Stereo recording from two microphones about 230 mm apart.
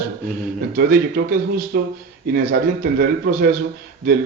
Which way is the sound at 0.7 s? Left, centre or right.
Right.